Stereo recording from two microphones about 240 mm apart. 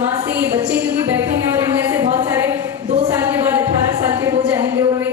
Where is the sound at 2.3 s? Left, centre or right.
Centre.